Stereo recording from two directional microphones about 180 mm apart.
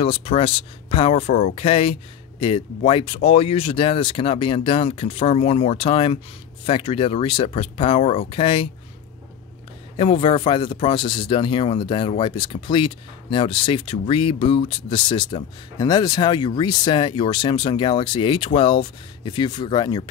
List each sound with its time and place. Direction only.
0.0 s speech: 30° left (ahead or behind)
9.9 s speech: 30° left (ahead or behind)